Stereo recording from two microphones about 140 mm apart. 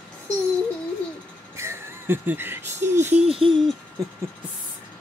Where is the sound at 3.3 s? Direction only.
40° right (ahead or behind).